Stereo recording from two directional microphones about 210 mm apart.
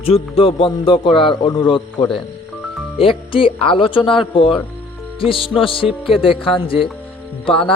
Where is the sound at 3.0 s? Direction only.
25° left (ahead or behind).